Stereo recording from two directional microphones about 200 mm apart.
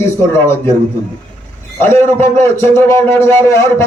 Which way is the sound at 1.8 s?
10° left (ahead or behind).